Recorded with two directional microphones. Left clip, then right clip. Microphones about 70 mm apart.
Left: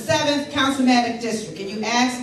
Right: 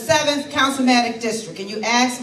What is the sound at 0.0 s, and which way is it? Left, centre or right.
A woman's voice, right.